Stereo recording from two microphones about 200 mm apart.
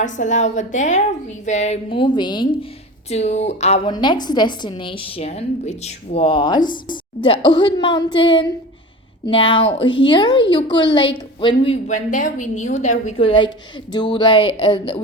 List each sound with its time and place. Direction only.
0.0 s a woman's voice: 35° left (ahead or behind)
3.9 s a woman's voice: 20° left (ahead or behind)